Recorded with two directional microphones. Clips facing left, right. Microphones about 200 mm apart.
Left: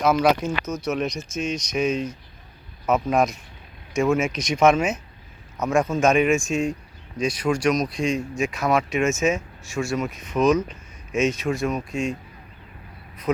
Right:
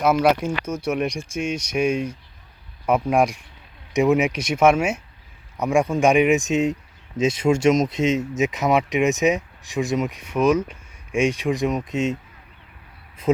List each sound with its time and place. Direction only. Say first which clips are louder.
0.0 s speech: right 1 dB; 10° right (ahead or behind)
13.3 s speech: right 4 dB; 25° right (ahead or behind)